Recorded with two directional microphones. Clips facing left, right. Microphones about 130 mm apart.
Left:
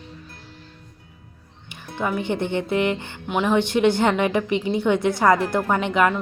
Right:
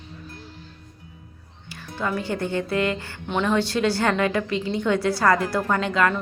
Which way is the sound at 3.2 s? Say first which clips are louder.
Left 2 dB; 10° left (ahead or behind).